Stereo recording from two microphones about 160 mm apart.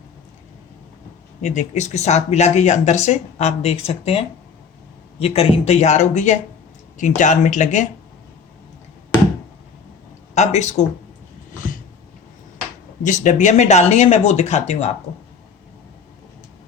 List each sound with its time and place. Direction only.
1.4 s speech: 50° left (ahead or behind)
5.2 s speech: 40° left (ahead or behind)
10.3 s speech: 45° left (ahead or behind)
13.0 s speech: 50° left (ahead or behind)